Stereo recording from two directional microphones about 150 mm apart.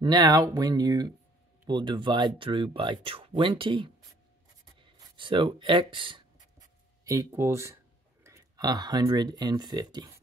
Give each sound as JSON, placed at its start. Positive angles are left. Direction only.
{"t": 0.0, "sound": "speech", "side_deg": -30}
{"t": 7.1, "sound": "speech", "side_deg": -20}